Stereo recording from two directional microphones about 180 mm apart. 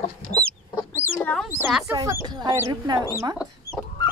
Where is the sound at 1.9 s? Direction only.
15° right (ahead or behind).